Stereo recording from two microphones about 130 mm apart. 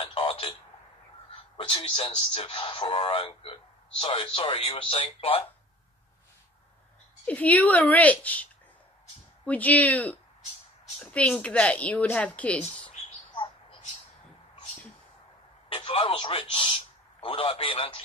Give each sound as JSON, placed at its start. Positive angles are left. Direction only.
{"t": 0.0, "sound": "telephone", "side_deg": 40}
{"t": 1.6, "sound": "speech", "side_deg": 40}
{"t": 7.2, "sound": "a woman's voice", "side_deg": 10}
{"t": 9.5, "sound": "a woman's voice", "side_deg": 10}
{"t": 13.3, "sound": "bird", "side_deg": 40}
{"t": 15.7, "sound": "a man's voice", "side_deg": 45}